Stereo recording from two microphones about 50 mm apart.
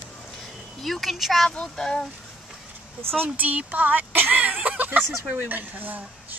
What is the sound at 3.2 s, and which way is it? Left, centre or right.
Speech, right.